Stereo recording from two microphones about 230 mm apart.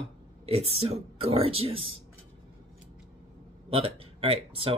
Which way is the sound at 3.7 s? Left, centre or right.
Right.